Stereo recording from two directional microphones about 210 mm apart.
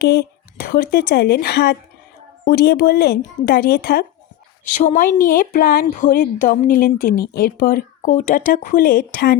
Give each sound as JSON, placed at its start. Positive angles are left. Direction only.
{"t": 0.0, "sound": "speech", "side_deg": 50}
{"t": 4.6, "sound": "speech", "side_deg": 35}